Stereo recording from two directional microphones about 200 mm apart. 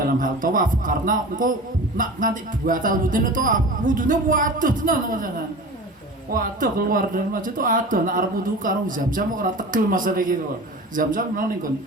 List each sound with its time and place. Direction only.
0.0 s speech: 45° right (ahead or behind)
6.3 s speech: 45° right (ahead or behind)